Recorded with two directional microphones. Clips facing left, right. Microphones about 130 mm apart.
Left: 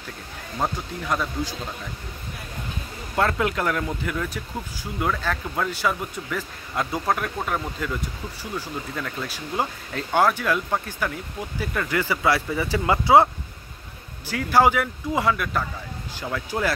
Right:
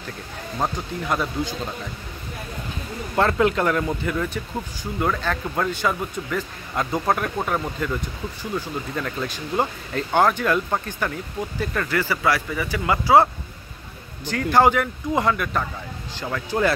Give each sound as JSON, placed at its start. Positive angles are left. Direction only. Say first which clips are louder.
{"t": 0.6, "sound": "speech", "louder": "right 1 dB", "side_deg": -5}
{"t": 3.2, "sound": "speech", "louder": "right 3 dB", "side_deg": 0}
{"t": 14.2, "sound": "speech", "louder": "right 1 dB", "side_deg": 5}